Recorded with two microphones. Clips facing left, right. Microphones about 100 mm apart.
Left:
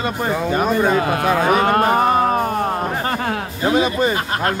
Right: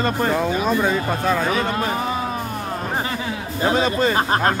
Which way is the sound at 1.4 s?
55° left (ahead or behind).